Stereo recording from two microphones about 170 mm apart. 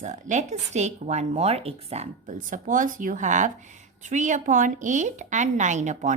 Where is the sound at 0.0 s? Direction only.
45° right (ahead or behind).